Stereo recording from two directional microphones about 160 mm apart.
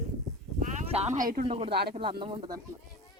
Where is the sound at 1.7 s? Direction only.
90° right.